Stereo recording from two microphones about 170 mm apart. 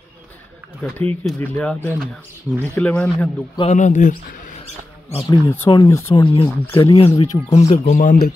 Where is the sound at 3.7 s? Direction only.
45° left (ahead or behind).